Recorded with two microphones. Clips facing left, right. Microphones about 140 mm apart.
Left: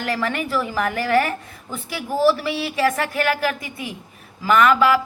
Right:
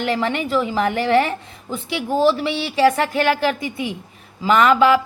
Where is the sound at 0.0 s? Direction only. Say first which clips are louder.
Right 3 dB; 25° right (ahead or behind).